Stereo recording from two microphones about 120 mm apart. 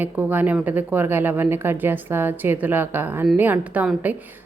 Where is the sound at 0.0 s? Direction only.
15° right (ahead or behind).